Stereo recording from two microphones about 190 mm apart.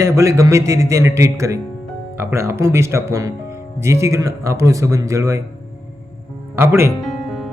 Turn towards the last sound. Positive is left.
turn(degrees=0)  # may be behind; listen again after turning